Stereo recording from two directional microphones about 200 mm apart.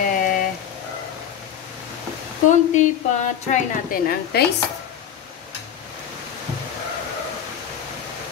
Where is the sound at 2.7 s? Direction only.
35° left (ahead or behind).